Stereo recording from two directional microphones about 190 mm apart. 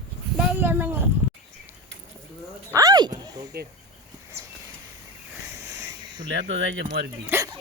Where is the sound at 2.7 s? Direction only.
20° right (ahead or behind).